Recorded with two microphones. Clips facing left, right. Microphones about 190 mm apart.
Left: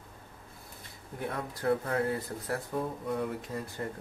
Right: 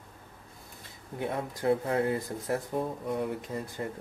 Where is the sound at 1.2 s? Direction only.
20° right (ahead or behind).